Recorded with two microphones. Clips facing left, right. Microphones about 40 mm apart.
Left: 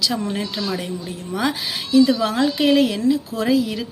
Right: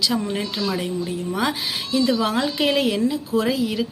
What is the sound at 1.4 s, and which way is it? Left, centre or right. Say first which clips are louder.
A woman's voice: left 3 dB; centre.